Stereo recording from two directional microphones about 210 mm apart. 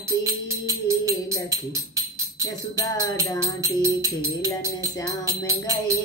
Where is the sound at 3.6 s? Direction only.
15° right (ahead or behind).